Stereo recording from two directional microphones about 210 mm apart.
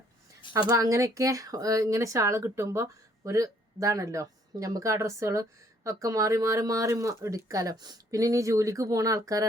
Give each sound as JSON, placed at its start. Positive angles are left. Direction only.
{"t": 0.7, "sound": "speech", "side_deg": -15}